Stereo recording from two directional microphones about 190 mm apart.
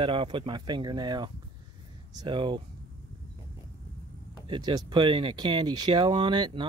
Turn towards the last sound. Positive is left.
turn(degrees=-25)  # may be behind; listen again after turning